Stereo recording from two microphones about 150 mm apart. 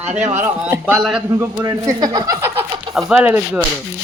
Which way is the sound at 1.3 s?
15° right (ahead or behind).